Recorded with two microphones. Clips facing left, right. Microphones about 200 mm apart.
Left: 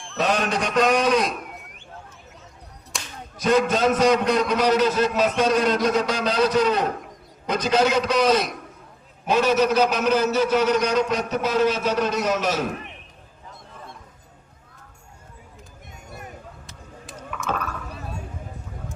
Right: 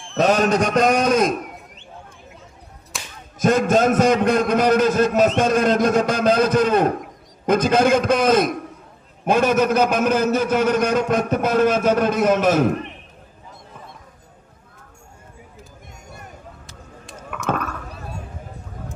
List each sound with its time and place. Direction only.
0.2 s a man's voice: 45° right (ahead or behind)
2.9 s whip: centre (ahead or behind)
3.3 s a man's voice: 50° right (ahead or behind)
17.3 s a sound: 55° right (ahead or behind)